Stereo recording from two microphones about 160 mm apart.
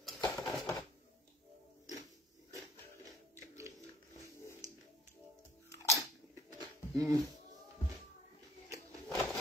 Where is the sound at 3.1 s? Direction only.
20° right (ahead or behind).